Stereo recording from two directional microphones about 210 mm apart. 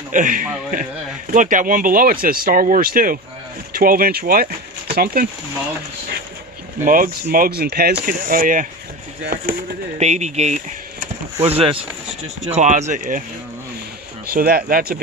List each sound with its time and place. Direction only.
0.1 s speech: 40° right (ahead or behind)
6.8 s speech: 40° right (ahead or behind)
14.2 s speech: 45° right (ahead or behind)